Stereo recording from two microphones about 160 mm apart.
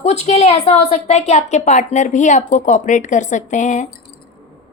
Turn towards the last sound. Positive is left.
turn(degrees=50)  # may be behind; listen again after turning